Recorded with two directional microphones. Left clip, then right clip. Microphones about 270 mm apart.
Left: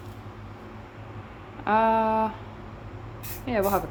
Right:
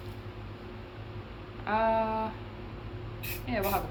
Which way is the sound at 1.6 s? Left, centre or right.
Left.